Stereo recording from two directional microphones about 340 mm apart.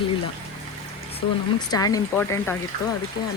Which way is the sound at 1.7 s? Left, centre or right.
Centre.